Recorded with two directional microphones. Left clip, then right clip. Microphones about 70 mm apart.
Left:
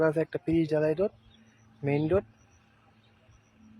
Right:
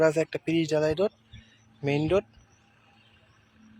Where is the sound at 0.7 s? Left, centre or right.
Centre.